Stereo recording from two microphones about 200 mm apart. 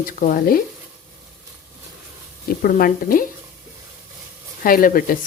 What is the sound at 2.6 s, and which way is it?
Speech, 45° left (ahead or behind).